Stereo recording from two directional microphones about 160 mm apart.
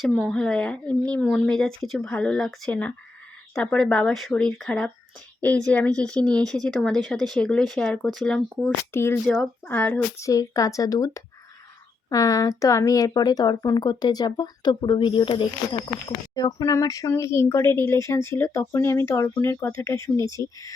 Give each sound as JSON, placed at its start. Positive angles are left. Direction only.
{"t": 0.0, "sound": "speech", "side_deg": 0}
{"t": 8.9, "sound": "speech", "side_deg": 15}
{"t": 9.2, "sound": "speech", "side_deg": 0}